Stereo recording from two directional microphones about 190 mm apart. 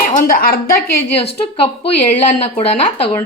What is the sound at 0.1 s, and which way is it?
Speech, 45° left (ahead or behind).